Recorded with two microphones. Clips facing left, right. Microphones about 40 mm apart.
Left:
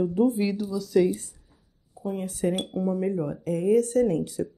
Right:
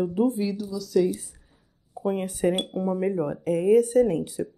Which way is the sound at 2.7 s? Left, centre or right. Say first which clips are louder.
Right 1 dB; right.